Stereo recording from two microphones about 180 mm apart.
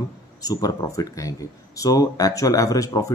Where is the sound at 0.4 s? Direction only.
20° left (ahead or behind).